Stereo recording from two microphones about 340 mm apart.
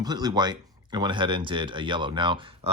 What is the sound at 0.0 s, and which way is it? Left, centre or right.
Speech, centre.